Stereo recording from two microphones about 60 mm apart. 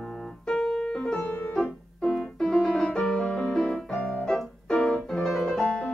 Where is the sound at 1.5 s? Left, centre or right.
Centre.